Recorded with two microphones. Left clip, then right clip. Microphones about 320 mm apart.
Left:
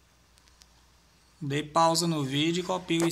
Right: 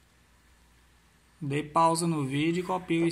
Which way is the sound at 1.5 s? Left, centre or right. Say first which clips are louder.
Even; centre.